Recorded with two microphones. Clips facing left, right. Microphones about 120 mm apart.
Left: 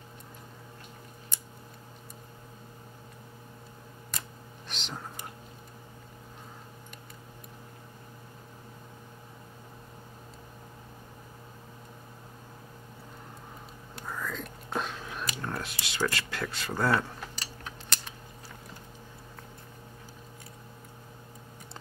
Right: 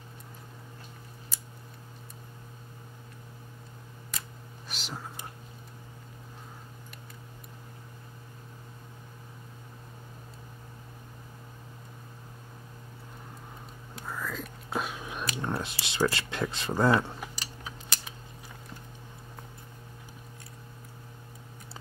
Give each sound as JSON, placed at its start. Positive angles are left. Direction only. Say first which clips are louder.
{"t": 4.6, "sound": "whispering", "louder": "even", "side_deg": -5}
{"t": 13.9, "sound": "whispering", "louder": "even", "side_deg": -5}
{"t": 16.1, "sound": "speech", "louder": "right 2 dB", "side_deg": -25}
{"t": 17.2, "sound": "a sound", "louder": "right 1 dB", "side_deg": -5}